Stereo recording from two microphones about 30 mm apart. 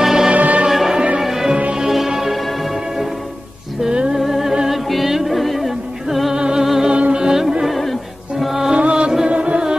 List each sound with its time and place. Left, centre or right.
0.0 s music: centre
0.3 s music: right
0.7 s music: centre
4.2 s music: centre
6.3 s music: right
6.6 s music: centre
6.9 s music: right
7.2 s music: centre
7.6 s music: centre
8.7 s music: right